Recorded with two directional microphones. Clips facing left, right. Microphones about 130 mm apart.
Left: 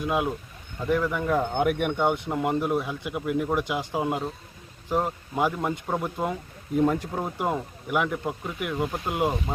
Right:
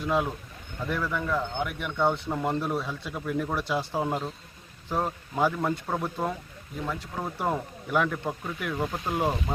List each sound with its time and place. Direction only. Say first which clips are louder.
0.0 s speech: left 1 dB; 10° left (ahead or behind)
1.5 s speech: left 8 dB; 55° left (ahead or behind)
2.0 s speech: left 1 dB; 15° left (ahead or behind)
6.7 s speech: left 11 dB; 45° left (ahead or behind)
7.2 s speech: left 2 dB; 15° left (ahead or behind)